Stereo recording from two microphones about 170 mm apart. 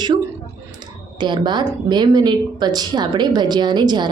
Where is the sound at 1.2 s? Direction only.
25° right (ahead or behind).